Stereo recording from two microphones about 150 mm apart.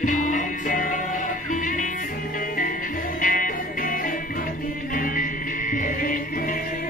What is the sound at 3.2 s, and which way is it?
Music, 65° left (ahead or behind).